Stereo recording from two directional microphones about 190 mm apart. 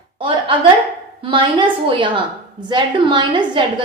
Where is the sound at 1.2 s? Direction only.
25° right (ahead or behind).